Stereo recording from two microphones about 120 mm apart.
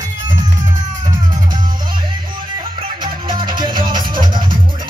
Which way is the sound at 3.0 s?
40° right (ahead or behind).